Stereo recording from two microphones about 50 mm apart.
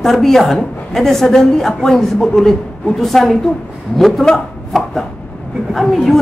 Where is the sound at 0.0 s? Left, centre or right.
Centre.